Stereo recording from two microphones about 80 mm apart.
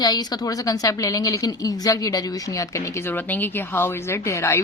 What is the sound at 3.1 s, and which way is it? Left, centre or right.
Speech, left.